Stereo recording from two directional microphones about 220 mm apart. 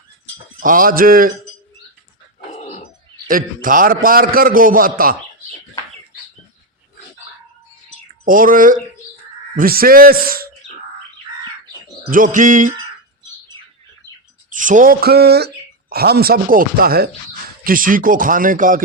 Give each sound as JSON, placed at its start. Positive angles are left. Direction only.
{"t": 0.6, "sound": "a man's voice", "side_deg": -40}
{"t": 2.5, "sound": "a sound", "side_deg": 30}
{"t": 3.2, "sound": "a man's voice", "side_deg": -40}
{"t": 8.2, "sound": "a man's voice", "side_deg": -40}
{"t": 12.1, "sound": "a man's voice", "side_deg": -35}
{"t": 14.5, "sound": "a man's voice", "side_deg": -35}